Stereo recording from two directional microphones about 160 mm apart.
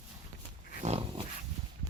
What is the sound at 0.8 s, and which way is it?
Dog, 35° right (ahead or behind).